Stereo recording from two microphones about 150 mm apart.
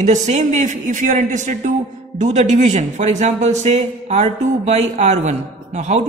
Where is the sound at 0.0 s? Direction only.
55° right (ahead or behind).